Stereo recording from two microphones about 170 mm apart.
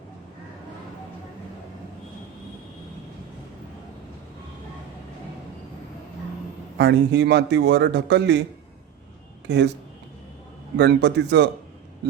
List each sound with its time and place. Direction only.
6.7 s a man's voice: 85° right
9.5 s a man's voice: 85° right
10.8 s a man's voice: 90° right